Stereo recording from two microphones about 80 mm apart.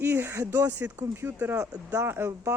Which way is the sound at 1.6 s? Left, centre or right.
Right.